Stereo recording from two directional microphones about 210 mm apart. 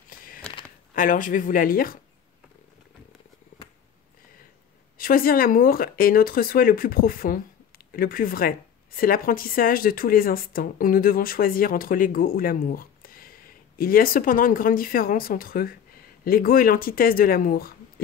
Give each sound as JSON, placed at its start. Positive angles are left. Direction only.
{"t": 0.1, "sound": "a sound", "side_deg": 40}
{"t": 0.9, "sound": "speech", "side_deg": 40}
{"t": 4.9, "sound": "speech", "side_deg": 45}